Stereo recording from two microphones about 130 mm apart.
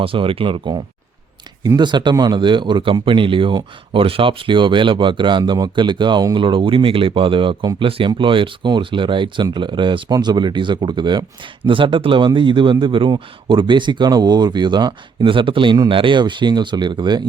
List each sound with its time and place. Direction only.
0.0 s speech: 45° right (ahead or behind)